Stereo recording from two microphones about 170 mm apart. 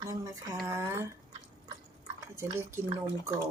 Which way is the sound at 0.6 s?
15° right (ahead or behind).